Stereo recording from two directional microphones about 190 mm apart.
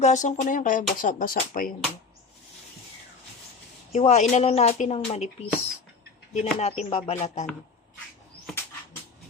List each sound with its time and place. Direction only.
0.0 s speech: 40° left (ahead or behind)
3.9 s speech: 35° left (ahead or behind)
6.3 s speech: 35° left (ahead or behind)
8.5 s dog: centre (ahead or behind)